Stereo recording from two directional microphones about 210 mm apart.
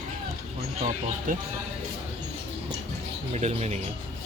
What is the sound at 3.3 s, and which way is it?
Speech, 30° right (ahead or behind).